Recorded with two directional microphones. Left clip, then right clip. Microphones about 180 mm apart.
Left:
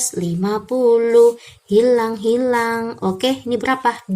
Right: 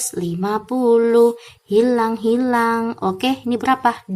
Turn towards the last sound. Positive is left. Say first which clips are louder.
# right 1 dB
turn(degrees=-25)  # may be behind; listen again after turning